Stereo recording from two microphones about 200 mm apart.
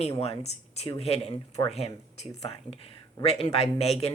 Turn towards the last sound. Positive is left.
turn(degrees=30)  # may be behind; listen again after turning